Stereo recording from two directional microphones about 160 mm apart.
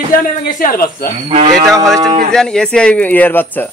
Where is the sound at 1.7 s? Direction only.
Centre (ahead or behind).